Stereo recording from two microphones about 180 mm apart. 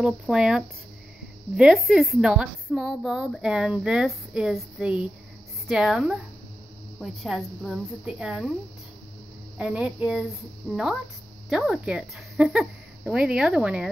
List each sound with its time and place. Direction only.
0.0 s a woman's voice: 5° right (ahead or behind)
9.6 s a woman's voice: 5° right (ahead or behind)